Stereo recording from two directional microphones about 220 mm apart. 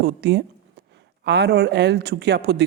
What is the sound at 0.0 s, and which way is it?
Speech, 50° right (ahead or behind).